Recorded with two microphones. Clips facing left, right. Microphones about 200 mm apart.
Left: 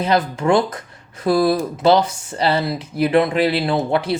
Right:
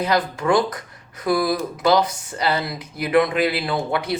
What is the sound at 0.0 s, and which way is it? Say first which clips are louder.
Speech: left 3 dB; 25° left (ahead or behind).